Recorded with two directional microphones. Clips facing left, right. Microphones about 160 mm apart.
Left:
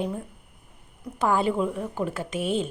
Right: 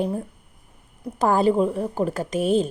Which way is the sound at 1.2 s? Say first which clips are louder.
Right 5 dB; 40° right (ahead or behind).